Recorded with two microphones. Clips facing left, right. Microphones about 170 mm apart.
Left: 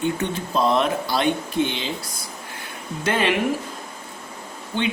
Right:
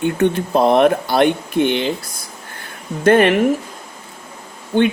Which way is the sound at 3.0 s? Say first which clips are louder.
Right 10 dB; 55° right (ahead or behind).